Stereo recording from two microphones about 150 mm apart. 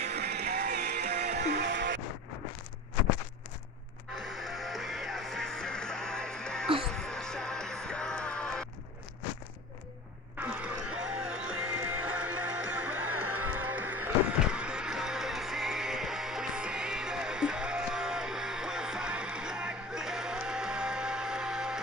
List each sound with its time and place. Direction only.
0.1 s music: 90° right
4.3 s music: centre (ahead or behind)
10.4 s music: 10° right (ahead or behind)